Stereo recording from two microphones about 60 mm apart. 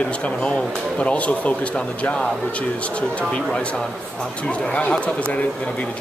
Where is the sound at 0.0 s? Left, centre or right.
Centre.